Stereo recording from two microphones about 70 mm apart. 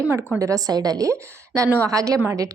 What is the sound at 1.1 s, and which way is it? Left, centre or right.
A woman's voice, right.